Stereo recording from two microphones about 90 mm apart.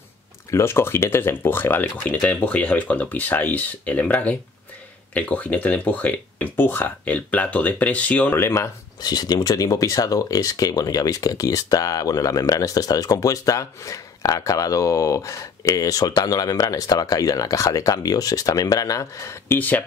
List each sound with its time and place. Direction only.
0.5 s speech: 30° left (ahead or behind)
8.4 s speech: 30° left (ahead or behind)
9.0 s speech: 45° left (ahead or behind)